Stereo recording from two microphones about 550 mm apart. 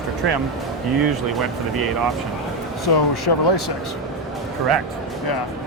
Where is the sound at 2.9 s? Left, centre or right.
Left.